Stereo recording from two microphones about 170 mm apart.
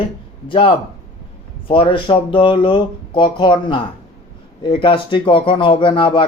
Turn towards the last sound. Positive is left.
turn(degrees=30)  # may be behind; listen again after turning